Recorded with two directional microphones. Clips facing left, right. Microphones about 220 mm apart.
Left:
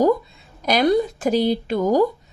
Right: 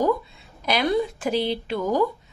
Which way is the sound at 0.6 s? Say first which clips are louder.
Left 5 dB; 40° left (ahead or behind).